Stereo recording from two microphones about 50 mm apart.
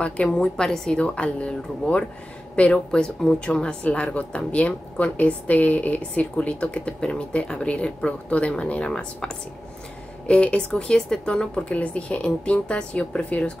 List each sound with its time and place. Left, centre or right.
0.0 s a woman's voice: left